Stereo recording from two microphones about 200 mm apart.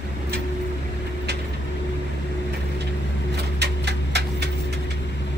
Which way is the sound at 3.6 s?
55° right (ahead or behind).